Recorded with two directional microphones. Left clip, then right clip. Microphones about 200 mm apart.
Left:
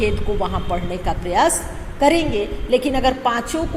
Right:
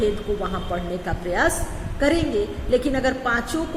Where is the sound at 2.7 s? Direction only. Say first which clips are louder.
Left 4 dB; 30° right (ahead or behind).